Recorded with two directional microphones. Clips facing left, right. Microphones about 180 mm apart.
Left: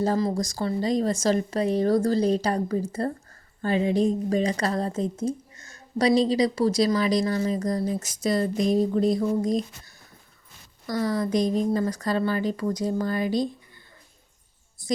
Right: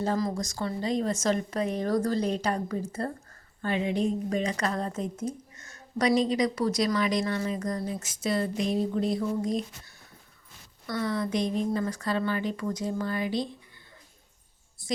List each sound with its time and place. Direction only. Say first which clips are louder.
0.0 s a woman's voice: left 4 dB; 35° left (ahead or behind)
14.8 s a woman's voice: left 5 dB; 40° left (ahead or behind)